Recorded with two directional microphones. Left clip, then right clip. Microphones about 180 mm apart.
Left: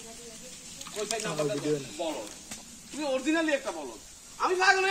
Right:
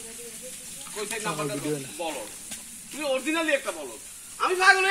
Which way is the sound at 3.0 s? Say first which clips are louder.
Right 2 dB; 45° left (ahead or behind).